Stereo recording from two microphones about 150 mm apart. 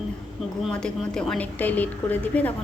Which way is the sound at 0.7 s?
5° left (ahead or behind).